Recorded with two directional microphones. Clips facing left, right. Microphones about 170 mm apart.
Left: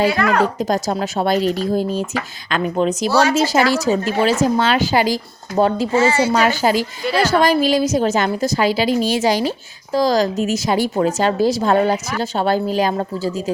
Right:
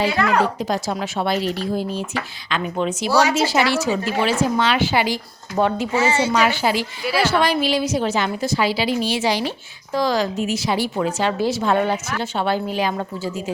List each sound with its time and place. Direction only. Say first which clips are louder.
0.6 s a woman's voice: left 4 dB; 45° left (ahead or behind)
3.1 s speech: even; 15° right (ahead or behind)
3.3 s a woman's voice: left 3 dB; 40° left (ahead or behind)
5.9 s speech: left 4 dB; 15° right (ahead or behind)
6.3 s a woman's voice: left 3 dB; 40° left (ahead or behind)
7.0 s a woman's voice: left 2 dB; 5° right (ahead or behind)
7.3 s a woman's voice: left 5 dB; 40° left (ahead or behind)